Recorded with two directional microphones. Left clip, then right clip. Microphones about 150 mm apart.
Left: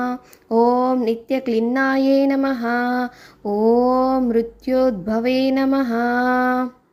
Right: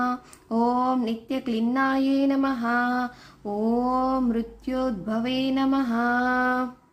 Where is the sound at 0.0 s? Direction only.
30° left (ahead or behind).